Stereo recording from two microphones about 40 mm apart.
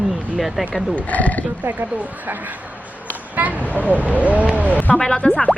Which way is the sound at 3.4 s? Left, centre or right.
Right.